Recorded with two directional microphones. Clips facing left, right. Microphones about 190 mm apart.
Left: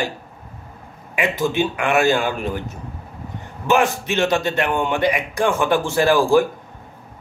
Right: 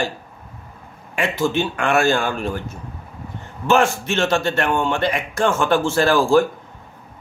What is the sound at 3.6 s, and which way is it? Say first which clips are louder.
A man's voice: right 1 dB; 15° left (ahead or behind).